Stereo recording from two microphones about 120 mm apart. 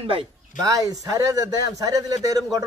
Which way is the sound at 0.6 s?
30° right (ahead or behind).